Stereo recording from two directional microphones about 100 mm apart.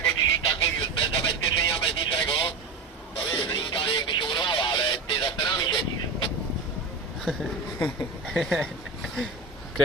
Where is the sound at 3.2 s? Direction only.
45° left (ahead or behind).